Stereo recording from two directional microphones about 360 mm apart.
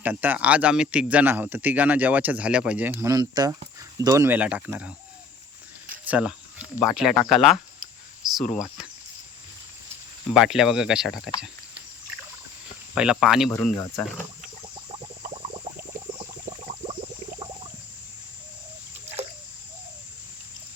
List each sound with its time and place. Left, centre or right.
0.0 s speech: centre
6.1 s speech: centre
10.3 s speech: centre
12.9 s speech: centre